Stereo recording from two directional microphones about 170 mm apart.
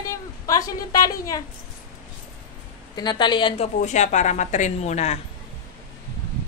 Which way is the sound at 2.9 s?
25° left (ahead or behind).